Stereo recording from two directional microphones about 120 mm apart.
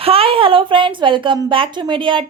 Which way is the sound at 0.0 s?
50° right (ahead or behind).